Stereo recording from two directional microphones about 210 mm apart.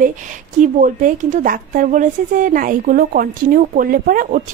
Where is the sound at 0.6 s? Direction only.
40° right (ahead or behind).